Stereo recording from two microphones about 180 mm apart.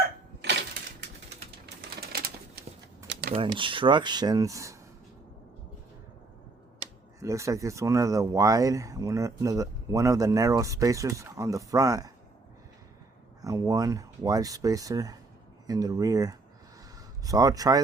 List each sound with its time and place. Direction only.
3.1 s a sound: 65° right (ahead or behind)
3.3 s speech: 30° right (ahead or behind)
7.2 s speech: 15° right (ahead or behind)
13.4 s speech: 20° right (ahead or behind)